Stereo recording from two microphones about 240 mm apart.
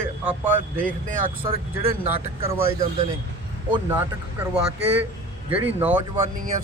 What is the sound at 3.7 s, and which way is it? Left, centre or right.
Speech, centre.